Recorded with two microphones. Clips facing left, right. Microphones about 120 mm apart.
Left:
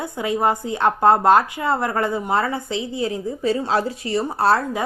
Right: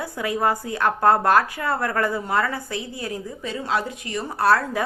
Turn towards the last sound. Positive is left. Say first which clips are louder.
# left 1 dB
turn(degrees=25)  # may be behind; listen again after turning